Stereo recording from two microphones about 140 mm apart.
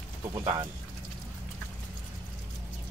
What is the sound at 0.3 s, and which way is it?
Speech, 30° right (ahead or behind).